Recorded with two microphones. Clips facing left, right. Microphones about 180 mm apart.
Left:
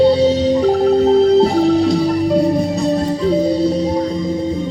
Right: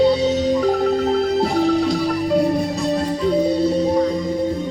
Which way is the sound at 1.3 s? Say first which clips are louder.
Left 5 dB; 20° left (ahead or behind).